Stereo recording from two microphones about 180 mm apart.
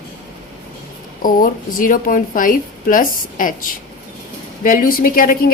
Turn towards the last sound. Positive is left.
turn(degrees=50)  # may be behind; listen again after turning